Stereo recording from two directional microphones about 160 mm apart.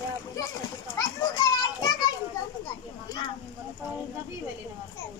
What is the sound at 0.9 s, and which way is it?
Children playing, 25° left (ahead or behind).